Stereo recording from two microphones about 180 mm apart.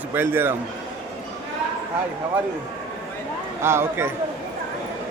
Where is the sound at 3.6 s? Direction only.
15° right (ahead or behind).